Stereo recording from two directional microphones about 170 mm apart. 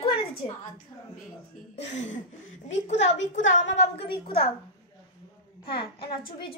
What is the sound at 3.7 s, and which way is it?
Speech, 85° left.